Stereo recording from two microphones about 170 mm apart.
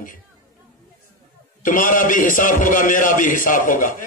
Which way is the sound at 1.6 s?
50° left (ahead or behind).